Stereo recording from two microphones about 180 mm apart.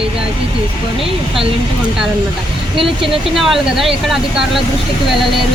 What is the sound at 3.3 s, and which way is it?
Speech, centre (ahead or behind).